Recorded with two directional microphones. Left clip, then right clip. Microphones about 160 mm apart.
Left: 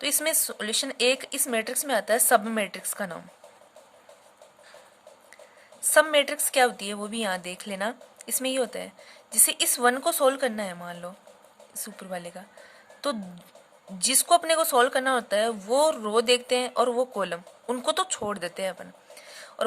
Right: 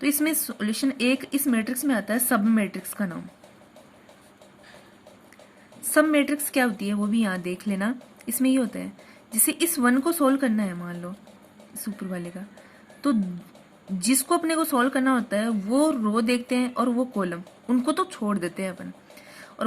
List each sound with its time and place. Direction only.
0.0 s speech: 45° left (ahead or behind)
5.9 s speech: 50° left (ahead or behind)
14.0 s speech: 45° left (ahead or behind)